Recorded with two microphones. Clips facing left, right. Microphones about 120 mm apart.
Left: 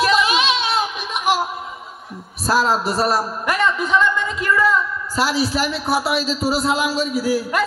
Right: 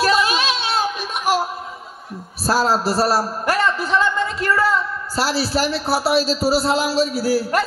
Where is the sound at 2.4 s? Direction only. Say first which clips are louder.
Even; 35° right (ahead or behind).